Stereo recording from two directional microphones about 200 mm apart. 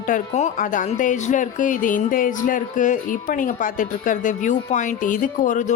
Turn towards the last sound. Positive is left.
turn(degrees=40)  # may be behind; listen again after turning